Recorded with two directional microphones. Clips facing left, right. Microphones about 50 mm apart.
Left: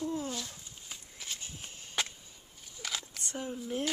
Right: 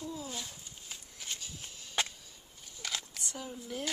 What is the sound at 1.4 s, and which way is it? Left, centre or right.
Walk, left.